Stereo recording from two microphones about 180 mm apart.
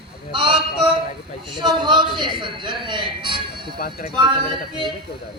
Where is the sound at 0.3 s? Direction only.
30° right (ahead or behind).